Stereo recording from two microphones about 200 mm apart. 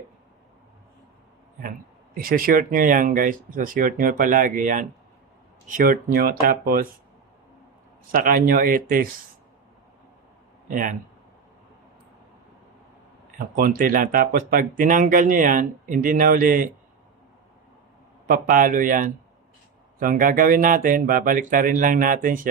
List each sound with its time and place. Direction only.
2.1 s speech: 45° right (ahead or behind)
8.1 s speech: 45° right (ahead or behind)
10.7 s speech: 45° right (ahead or behind)
13.6 s speech: 45° right (ahead or behind)
18.3 s speech: 45° right (ahead or behind)